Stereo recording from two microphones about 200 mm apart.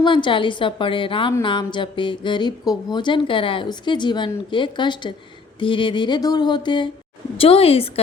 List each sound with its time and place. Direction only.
0.0 s speech: 25° left (ahead or behind)